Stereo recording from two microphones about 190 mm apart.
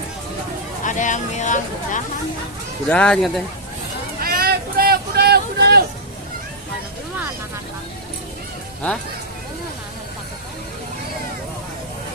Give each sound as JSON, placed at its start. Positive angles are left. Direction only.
{"t": 0.8, "sound": "speech", "side_deg": 40}
{"t": 2.9, "sound": "speech", "side_deg": 5}
{"t": 4.2, "sound": "a sound", "side_deg": -50}